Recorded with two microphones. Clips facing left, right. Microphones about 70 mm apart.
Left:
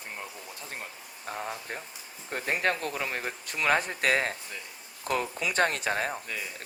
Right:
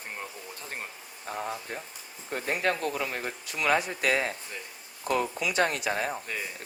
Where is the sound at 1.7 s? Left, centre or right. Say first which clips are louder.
Even; left.